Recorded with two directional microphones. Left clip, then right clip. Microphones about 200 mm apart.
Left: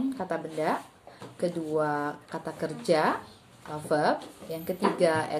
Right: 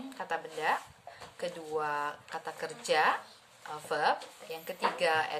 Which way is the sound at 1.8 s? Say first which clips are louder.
Left 4 dB; 15° right (ahead or behind).